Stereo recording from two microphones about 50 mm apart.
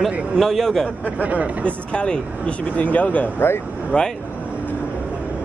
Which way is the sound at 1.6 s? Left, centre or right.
Left.